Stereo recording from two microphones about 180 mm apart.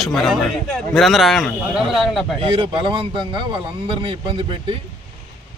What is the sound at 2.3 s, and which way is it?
A man's voice, 30° right (ahead or behind).